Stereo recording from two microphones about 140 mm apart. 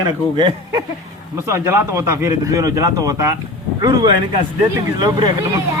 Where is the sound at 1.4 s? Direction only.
20° right (ahead or behind).